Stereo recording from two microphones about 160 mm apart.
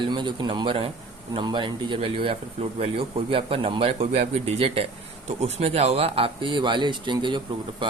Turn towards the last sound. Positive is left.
turn(degrees=-30)  # may be behind; listen again after turning